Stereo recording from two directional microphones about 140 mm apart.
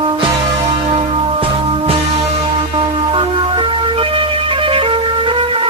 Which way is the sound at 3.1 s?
40° right (ahead or behind).